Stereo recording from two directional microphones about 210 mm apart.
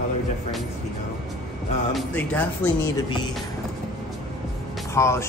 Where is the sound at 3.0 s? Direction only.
20° left (ahead or behind).